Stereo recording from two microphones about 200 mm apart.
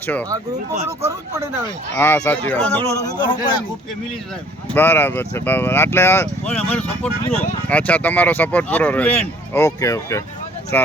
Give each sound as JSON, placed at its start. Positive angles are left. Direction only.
{"t": 2.0, "sound": "speech", "side_deg": 10}
{"t": 3.2, "sound": "a man's voice", "side_deg": 20}
{"t": 4.7, "sound": "speech", "side_deg": 10}